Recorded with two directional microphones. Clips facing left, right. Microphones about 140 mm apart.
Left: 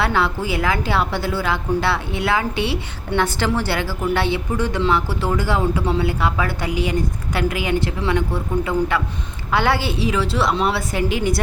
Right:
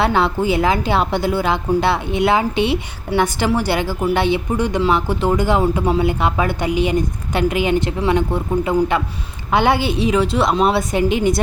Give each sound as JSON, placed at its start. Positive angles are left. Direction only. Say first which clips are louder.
{"t": 0.0, "sound": "a woman's voice", "louder": "right 4 dB", "side_deg": -20}